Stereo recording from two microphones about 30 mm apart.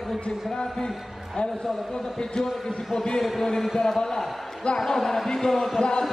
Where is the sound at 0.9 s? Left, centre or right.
Centre.